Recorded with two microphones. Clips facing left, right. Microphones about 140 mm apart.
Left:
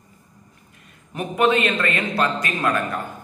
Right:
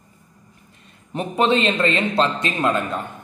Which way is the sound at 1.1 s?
30° right (ahead or behind).